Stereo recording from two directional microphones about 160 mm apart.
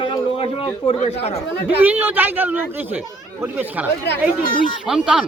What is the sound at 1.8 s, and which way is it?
A man's voice, 10° right (ahead or behind).